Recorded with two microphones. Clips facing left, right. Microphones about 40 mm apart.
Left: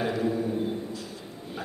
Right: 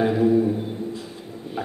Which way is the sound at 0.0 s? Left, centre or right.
Right.